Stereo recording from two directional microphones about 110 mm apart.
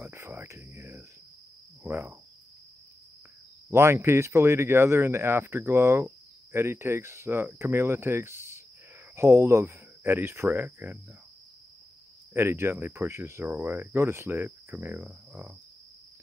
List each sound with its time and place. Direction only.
0.0 s cricket: 20° right (ahead or behind)
3.7 s speech: 25° right (ahead or behind)
12.4 s speech: 20° right (ahead or behind)